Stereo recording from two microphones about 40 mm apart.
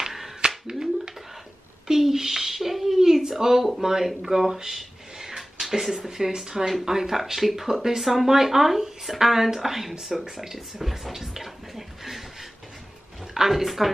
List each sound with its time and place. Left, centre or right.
0.0 s finger snapping: centre
0.7 s a sound: centre
1.9 s speech: centre
10.1 s bathtub: centre
13.2 s speech: centre